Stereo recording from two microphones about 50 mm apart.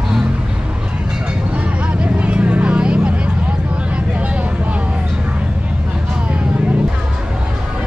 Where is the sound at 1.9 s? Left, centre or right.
Right.